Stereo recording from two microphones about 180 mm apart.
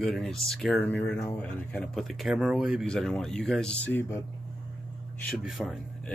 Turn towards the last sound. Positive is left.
turn(degrees=0)  # may be behind; listen again after turning